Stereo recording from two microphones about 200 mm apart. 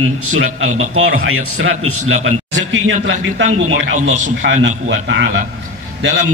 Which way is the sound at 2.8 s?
65° right (ahead or behind).